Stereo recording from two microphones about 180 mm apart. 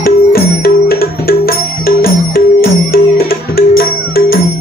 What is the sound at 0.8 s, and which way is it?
Music, 55° left (ahead or behind).